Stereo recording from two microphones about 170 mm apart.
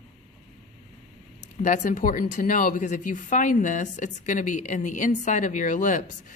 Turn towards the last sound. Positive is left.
turn(degrees=50)  # may be behind; listen again after turning